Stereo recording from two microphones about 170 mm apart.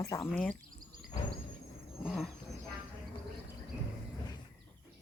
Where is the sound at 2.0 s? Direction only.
Centre (ahead or behind).